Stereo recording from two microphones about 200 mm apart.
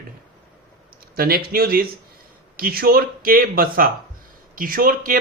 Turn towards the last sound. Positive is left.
turn(degrees=-45)  # may be behind; listen again after turning